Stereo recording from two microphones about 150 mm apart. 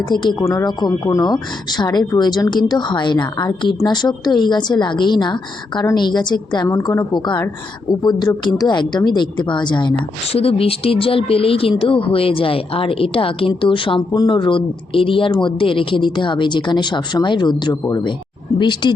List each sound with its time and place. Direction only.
0.1 s a woman's voice: 30° left (ahead or behind)